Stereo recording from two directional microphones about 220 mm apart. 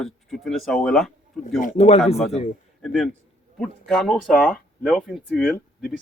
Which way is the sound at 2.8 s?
Centre (ahead or behind).